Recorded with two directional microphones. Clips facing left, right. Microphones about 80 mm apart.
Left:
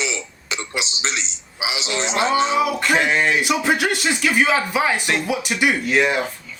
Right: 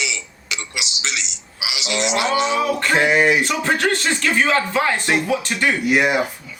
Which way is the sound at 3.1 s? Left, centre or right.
Centre.